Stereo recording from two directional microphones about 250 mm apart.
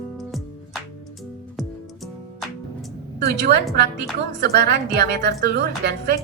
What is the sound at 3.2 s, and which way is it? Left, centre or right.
A woman's voice, right.